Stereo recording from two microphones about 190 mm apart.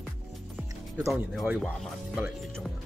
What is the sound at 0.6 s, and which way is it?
Speech, centre (ahead or behind).